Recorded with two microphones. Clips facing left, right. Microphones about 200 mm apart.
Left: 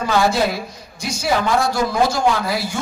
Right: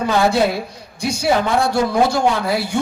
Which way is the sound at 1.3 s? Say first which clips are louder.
Right 1 dB; 25° right (ahead or behind).